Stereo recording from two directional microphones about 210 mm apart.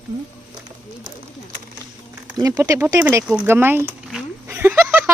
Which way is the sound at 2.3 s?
15° right (ahead or behind).